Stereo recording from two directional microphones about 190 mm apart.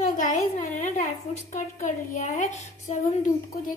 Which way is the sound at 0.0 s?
40° left (ahead or behind).